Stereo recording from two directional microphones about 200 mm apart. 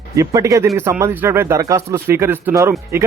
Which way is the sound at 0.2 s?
15° right (ahead or behind).